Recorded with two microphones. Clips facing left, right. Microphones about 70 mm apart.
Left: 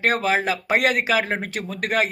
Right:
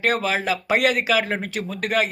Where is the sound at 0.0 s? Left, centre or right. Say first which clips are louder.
Left 1 dB; left.